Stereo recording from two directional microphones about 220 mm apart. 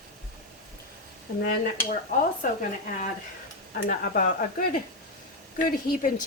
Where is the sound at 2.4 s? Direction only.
40° left (ahead or behind).